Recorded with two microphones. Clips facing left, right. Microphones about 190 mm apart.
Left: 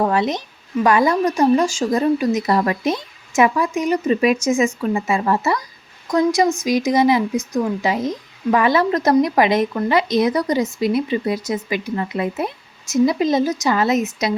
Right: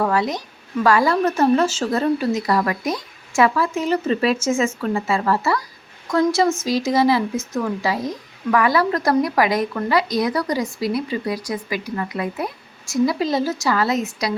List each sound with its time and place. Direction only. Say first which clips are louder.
0.0 s speech: left 2 dB; 20° left (ahead or behind)